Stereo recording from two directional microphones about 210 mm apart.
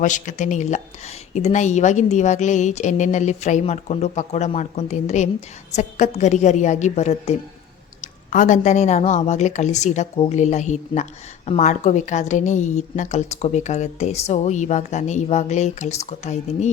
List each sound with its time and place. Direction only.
0.0 s a woman's voice: 35° left (ahead or behind)